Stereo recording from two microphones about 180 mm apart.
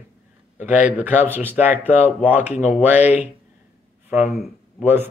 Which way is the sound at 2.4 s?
35° left (ahead or behind).